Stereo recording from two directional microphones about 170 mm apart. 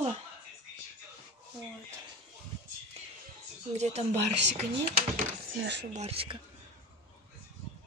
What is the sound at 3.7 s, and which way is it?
Speech, 40° right (ahead or behind).